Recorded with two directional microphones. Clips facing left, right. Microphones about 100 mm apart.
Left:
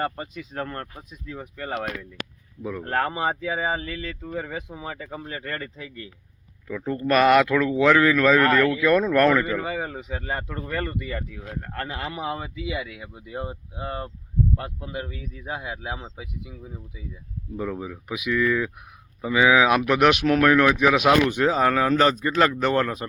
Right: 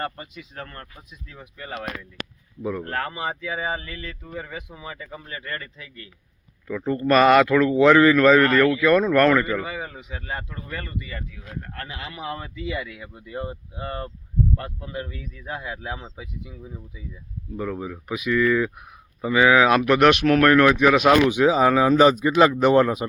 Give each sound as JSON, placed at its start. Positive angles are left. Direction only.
{"t": 0.2, "sound": "speech", "side_deg": 40}
{"t": 2.6, "sound": "speech", "side_deg": -5}
{"t": 2.8, "sound": "speech", "side_deg": 30}
{"t": 3.8, "sound": "speech", "side_deg": 5}
{"t": 4.7, "sound": "speech", "side_deg": 20}
{"t": 6.7, "sound": "speech", "side_deg": 0}
{"t": 10.2, "sound": "speech", "side_deg": 40}
{"t": 10.8, "sound": "speech", "side_deg": 55}
{"t": 11.8, "sound": "speech", "side_deg": 40}
{"t": 12.2, "sound": "a man's voice", "side_deg": 15}